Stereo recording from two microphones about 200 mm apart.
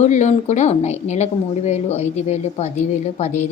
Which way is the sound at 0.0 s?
35° left (ahead or behind).